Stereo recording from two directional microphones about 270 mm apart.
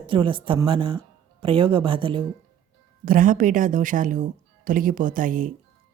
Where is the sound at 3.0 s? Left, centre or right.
Right.